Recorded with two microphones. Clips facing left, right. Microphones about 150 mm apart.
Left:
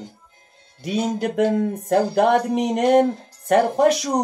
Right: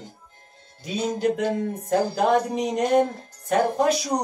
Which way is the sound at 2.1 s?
65° left (ahead or behind).